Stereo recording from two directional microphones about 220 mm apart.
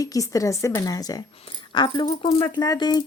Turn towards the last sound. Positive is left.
turn(degrees=20)  # may be behind; listen again after turning